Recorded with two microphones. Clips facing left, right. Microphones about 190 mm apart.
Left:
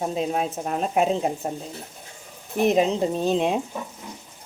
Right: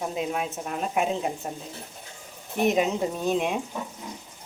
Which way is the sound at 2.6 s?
30° left (ahead or behind).